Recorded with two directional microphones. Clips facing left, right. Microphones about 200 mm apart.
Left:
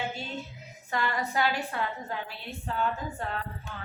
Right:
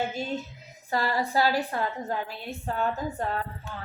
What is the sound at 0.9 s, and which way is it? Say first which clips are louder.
A woman's voice: right 3 dB; 35° right (ahead or behind).